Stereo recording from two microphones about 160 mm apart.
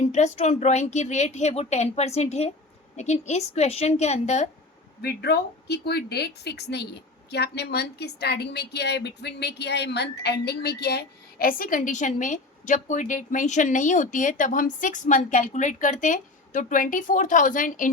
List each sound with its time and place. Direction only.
0.1 s a woman's voice: 45° left (ahead or behind)
5.0 s a woman's voice: 90° left; by 17.8 s 55° left (ahead or behind)